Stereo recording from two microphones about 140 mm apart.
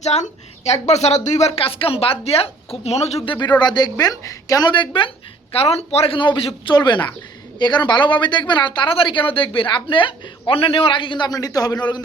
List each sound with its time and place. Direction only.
0.0 s a woman's voice: 50° left (ahead or behind)
3.6 s a woman's voice: 30° left (ahead or behind)